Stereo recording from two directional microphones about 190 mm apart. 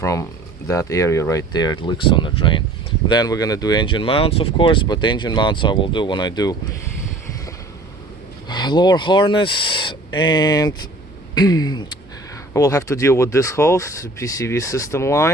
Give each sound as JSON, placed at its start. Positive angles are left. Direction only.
{"t": 0.0, "sound": "speech", "side_deg": 15}
{"t": 8.4, "sound": "speech", "side_deg": 20}